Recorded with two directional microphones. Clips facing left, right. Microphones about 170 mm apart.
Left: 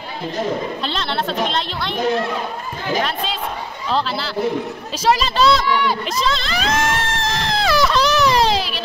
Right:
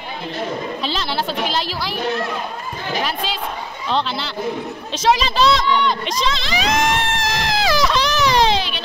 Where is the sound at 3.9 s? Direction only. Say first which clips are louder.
Left 1 dB; centre (ahead or behind).